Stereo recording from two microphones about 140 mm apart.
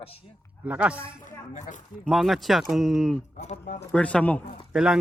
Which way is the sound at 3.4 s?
55° left (ahead or behind).